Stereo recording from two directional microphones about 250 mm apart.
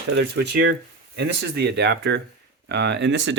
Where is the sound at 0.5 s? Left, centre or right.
Right.